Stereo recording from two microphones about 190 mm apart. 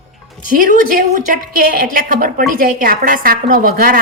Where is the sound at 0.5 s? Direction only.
50° right (ahead or behind).